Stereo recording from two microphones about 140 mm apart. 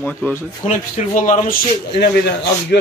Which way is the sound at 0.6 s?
65° left (ahead or behind).